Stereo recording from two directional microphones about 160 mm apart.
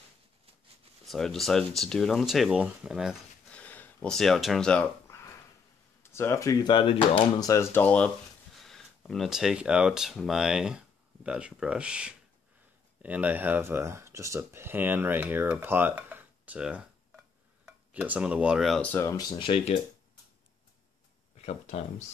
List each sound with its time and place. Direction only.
1.0 s speech: centre (ahead or behind)
3.4 s a sound: 10° left (ahead or behind)
6.1 s speech: 15° left (ahead or behind); by 19.7 s 35° left (ahead or behind)
21.4 s speech: 45° left (ahead or behind)